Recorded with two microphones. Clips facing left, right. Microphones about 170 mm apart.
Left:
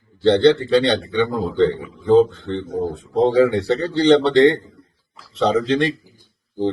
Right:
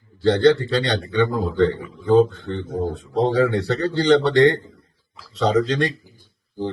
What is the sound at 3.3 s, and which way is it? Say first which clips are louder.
A man's voice: left 4 dB; 25° left (ahead or behind).